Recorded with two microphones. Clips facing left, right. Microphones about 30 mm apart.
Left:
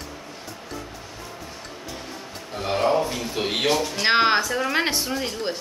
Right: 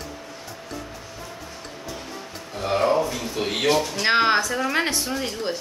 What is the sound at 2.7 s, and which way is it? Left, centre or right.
Speech, centre.